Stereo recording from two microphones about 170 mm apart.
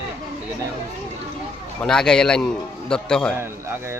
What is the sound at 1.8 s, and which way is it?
Speech, 5° left (ahead or behind).